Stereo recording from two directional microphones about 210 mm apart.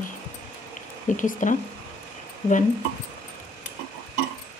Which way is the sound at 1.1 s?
40° left (ahead or behind).